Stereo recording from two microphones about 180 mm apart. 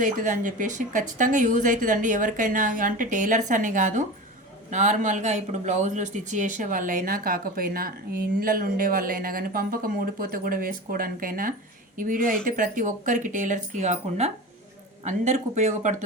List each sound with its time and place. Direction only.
0.0 s speech: 45° right (ahead or behind)